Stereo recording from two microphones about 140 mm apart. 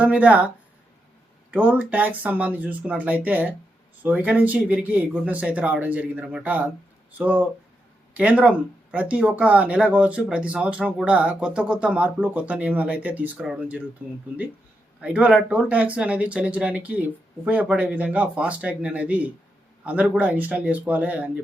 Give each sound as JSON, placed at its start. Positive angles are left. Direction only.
{"t": 0.0, "sound": "speech", "side_deg": -10}
{"t": 15.0, "sound": "speech", "side_deg": -10}